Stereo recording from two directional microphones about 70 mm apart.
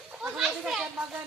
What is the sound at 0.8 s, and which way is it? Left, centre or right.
Speech, right.